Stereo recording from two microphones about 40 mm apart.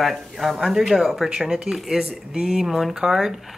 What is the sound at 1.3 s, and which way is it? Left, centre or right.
Speech, centre.